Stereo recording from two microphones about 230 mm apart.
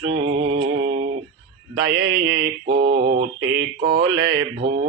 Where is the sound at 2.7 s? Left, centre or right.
Right.